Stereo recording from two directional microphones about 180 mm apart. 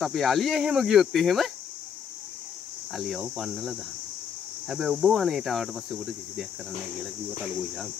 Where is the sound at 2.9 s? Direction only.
Centre (ahead or behind).